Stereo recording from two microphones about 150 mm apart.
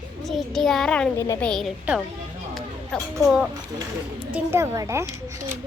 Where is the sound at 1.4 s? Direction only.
5° left (ahead or behind).